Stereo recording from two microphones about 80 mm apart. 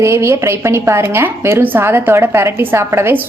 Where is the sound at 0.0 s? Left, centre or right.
Right.